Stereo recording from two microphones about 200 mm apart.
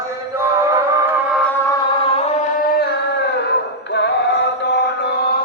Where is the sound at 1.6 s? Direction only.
20° left (ahead or behind); by 2.6 s 35° left (ahead or behind).